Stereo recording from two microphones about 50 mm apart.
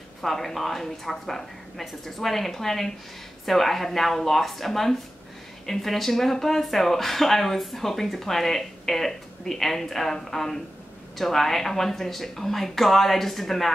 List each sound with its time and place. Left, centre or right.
0.2 s a woman's voice: centre